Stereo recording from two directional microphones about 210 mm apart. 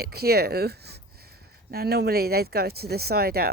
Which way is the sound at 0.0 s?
50° right (ahead or behind).